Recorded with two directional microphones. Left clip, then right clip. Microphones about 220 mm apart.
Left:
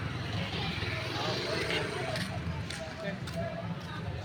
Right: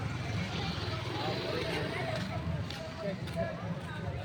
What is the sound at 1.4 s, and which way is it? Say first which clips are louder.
Vehicle: left 2 dB; 25° right (ahead or behind).